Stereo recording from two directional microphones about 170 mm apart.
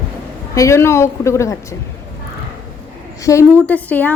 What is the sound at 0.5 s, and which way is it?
Speech, 15° left (ahead or behind).